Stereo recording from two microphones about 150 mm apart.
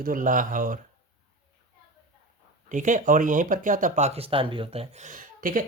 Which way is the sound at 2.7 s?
55° right (ahead or behind).